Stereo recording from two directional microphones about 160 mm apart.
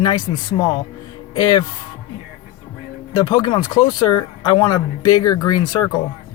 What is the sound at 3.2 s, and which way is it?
Speech, 25° left (ahead or behind).